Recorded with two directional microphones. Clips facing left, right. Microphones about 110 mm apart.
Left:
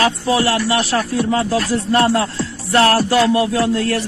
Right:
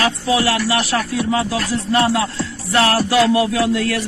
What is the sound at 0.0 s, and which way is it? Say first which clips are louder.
Speech: left 1 dB; 35° left (ahead or behind).